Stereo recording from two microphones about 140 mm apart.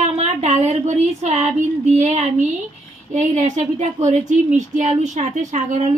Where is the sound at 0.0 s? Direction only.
55° right (ahead or behind).